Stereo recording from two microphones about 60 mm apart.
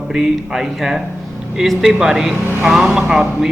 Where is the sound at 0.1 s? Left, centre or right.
Centre.